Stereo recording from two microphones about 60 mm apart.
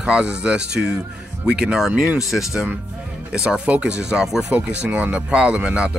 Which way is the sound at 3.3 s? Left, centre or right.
Centre.